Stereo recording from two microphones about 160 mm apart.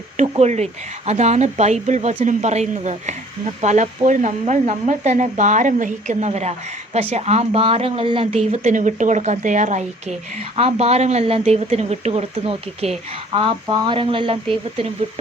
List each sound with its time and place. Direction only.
0.2 s a woman's voice: 45° right (ahead or behind)